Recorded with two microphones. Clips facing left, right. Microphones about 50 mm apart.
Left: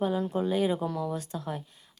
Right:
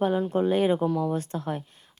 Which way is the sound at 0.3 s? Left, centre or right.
Right.